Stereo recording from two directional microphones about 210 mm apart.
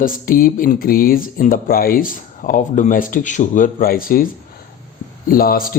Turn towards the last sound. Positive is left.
turn(degrees=45)  # may be behind; listen again after turning